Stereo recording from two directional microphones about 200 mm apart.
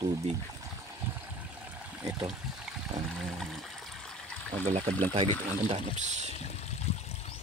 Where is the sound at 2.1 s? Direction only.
5° right (ahead or behind).